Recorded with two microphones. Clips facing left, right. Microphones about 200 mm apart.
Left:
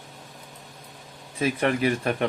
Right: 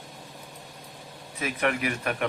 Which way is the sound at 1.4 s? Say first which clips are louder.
Left 4 dB; 30° left (ahead or behind).